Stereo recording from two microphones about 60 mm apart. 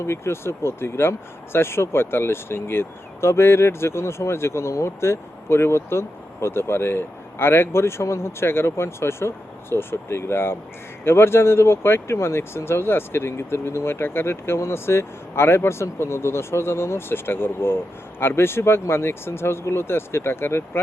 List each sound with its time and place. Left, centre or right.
0.0 s speech: left